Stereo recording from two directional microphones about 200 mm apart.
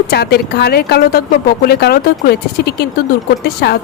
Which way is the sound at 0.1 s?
50° left (ahead or behind).